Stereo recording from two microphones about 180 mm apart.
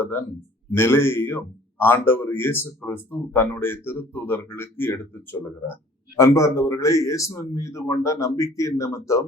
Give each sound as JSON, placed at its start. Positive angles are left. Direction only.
{"t": 0.0, "sound": "speech", "side_deg": 10}